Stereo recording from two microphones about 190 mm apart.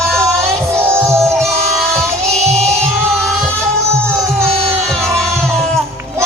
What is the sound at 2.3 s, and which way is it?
Music, 35° right (ahead or behind).